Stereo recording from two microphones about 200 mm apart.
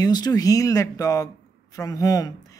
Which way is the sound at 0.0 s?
20° left (ahead or behind).